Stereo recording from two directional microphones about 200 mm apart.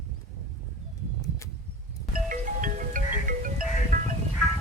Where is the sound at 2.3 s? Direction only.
40° right (ahead or behind).